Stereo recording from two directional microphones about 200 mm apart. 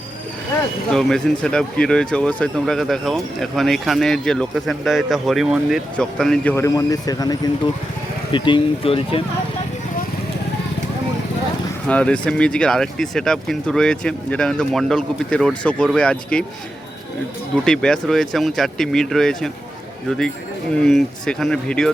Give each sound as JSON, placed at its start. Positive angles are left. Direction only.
{"t": 0.9, "sound": "speech", "side_deg": 0}
{"t": 6.7, "sound": "speech", "side_deg": 20}
{"t": 11.9, "sound": "speech", "side_deg": 5}
{"t": 17.7, "sound": "speech", "side_deg": 5}